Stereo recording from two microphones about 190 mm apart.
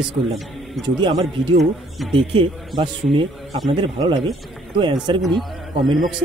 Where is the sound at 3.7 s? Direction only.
25° right (ahead or behind).